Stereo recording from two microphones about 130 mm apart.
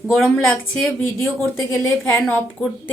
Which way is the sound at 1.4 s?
20° left (ahead or behind).